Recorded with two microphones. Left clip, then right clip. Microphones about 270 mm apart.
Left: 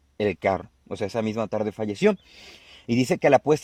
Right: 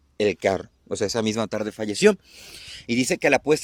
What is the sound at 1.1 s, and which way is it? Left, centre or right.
Speech, centre.